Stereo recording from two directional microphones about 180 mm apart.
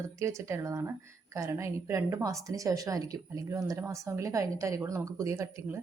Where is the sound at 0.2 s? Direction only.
15° right (ahead or behind).